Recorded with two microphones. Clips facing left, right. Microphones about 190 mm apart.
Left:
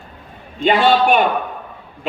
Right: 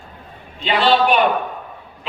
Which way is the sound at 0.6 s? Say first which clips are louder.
Left 2 dB; 50° left (ahead or behind).